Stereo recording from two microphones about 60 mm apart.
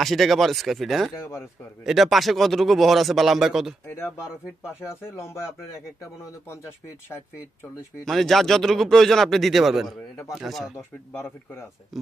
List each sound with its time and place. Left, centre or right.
0.0 s speech: centre
4.8 s speech: left
8.0 s speech: centre
10.8 s speech: left